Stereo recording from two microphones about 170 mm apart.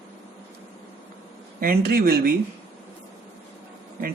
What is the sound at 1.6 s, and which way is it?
Speech, 65° right (ahead or behind).